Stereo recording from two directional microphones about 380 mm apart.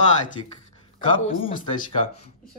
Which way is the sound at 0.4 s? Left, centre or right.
Centre.